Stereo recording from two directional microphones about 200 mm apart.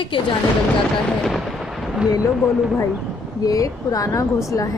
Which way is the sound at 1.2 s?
Centre (ahead or behind).